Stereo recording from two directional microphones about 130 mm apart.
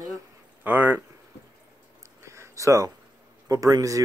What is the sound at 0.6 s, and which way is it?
Speech, 15° right (ahead or behind).